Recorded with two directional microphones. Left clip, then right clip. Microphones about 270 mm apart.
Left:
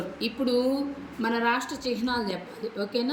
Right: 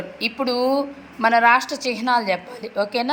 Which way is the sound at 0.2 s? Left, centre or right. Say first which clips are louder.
Right 5 dB; right.